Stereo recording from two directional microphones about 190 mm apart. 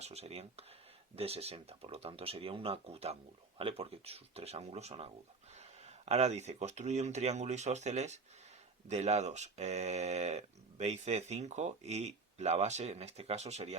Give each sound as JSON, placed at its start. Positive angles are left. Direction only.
{"t": 0.0, "sound": "speech", "side_deg": -35}